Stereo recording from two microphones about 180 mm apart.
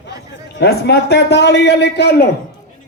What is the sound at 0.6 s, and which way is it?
A man's voice, 65° left (ahead or behind).